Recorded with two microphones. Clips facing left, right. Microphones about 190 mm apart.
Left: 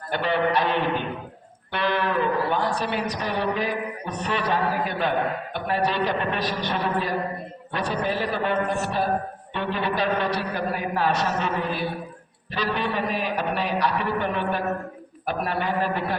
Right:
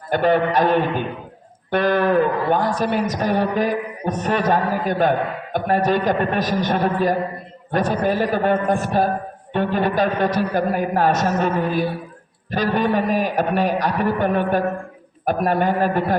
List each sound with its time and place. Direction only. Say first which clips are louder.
0.1 s a man's voice: right 6 dB; 45° right (ahead or behind)